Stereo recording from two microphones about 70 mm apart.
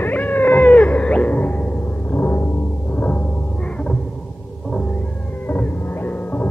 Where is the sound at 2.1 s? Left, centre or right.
Left.